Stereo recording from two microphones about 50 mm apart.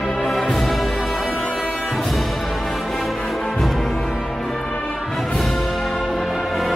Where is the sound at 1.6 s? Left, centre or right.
Left.